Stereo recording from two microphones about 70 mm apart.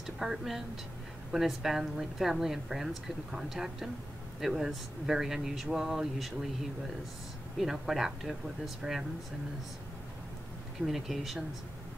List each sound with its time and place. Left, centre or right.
0.0 s a woman's voice: centre
7.5 s a woman's voice: centre
10.9 s a woman's voice: centre